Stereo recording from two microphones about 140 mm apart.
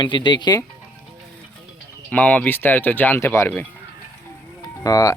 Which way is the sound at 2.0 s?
10° left (ahead or behind).